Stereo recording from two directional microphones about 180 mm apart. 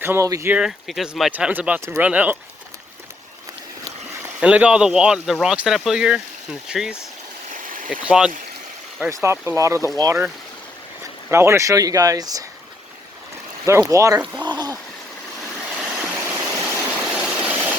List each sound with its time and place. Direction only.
0.0 s speech: 15° right (ahead or behind)
4.4 s speech: 5° right (ahead or behind)
7.5 s stream: 50° right (ahead or behind)
8.0 s speech: 5° right (ahead or behind)
9.0 s speech: 15° right (ahead or behind)
11.3 s speech: 15° right (ahead or behind)
13.8 s speech: 20° right (ahead or behind)
15.7 s vehicle: 10° right (ahead or behind)